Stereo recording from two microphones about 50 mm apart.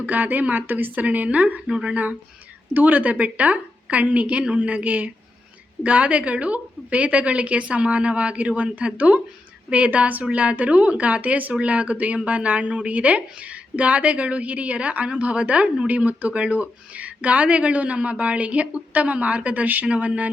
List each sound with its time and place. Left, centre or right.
0.0 s a woman's voice: right
2.7 s a woman's voice: right